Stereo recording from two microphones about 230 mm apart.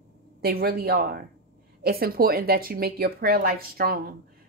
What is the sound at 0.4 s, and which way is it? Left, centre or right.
A woman's voice, right.